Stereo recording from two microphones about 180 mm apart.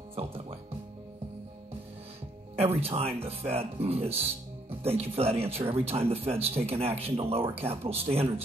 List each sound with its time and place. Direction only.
0.1 s music: 30° right (ahead or behind)
2.5 s speech: 35° right (ahead or behind)